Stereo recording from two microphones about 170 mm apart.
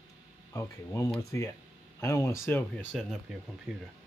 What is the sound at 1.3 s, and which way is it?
Speech, 15° left (ahead or behind).